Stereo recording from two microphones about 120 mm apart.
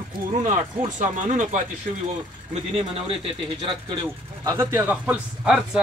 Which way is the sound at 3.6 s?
40° right (ahead or behind).